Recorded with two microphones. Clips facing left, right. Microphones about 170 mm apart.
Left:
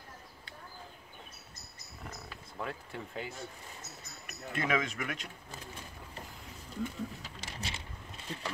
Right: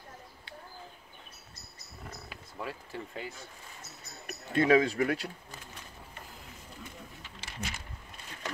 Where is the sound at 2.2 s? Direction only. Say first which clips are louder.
Even; 5° right (ahead or behind).